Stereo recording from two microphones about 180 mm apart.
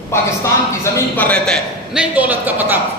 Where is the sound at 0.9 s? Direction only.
10° left (ahead or behind).